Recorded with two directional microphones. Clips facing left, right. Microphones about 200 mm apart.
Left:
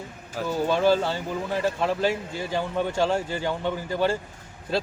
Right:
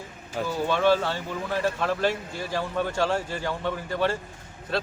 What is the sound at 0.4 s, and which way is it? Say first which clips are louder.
Speech: left 1 dB; 25° left (ahead or behind).